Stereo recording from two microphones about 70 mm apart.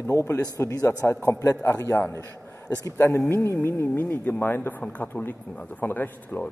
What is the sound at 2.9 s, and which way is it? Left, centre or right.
A man's voice, left.